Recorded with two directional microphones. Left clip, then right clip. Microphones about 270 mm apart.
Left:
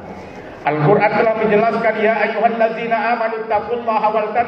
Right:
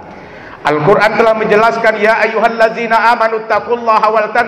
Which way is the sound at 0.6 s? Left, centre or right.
Right.